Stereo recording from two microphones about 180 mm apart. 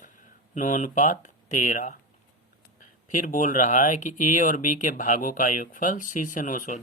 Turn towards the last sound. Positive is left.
turn(degrees=45)  # may be behind; listen again after turning